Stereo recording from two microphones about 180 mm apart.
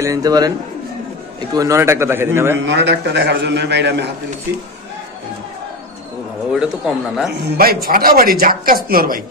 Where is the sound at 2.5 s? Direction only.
85° right.